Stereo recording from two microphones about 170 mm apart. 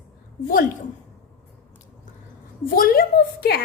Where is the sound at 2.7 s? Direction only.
55° left (ahead or behind).